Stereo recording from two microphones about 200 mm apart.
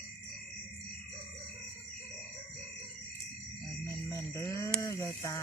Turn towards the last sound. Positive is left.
turn(degrees=15)  # may be behind; listen again after turning